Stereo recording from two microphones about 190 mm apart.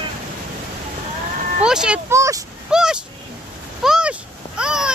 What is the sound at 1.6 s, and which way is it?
Speech, 5° right (ahead or behind).